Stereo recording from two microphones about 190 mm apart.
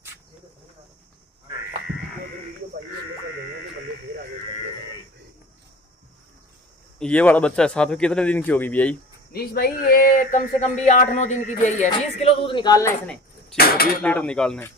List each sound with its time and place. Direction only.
7.0 s speech: 5° left (ahead or behind)
9.3 s speech: 55° left (ahead or behind); by 12.9 s 20° left (ahead or behind)
13.0 s a sound: 5° left (ahead or behind)
14.0 s speech: 5° left (ahead or behind)